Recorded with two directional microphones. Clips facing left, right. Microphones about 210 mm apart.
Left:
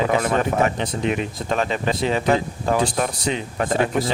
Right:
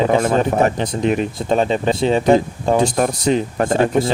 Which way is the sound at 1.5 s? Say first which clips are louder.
Right 6 dB; 30° right (ahead or behind).